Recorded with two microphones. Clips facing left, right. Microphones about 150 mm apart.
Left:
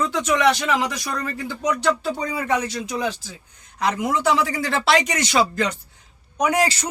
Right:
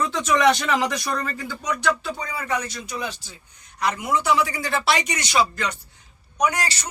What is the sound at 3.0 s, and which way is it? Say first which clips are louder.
Speech: left 4 dB; 90° left.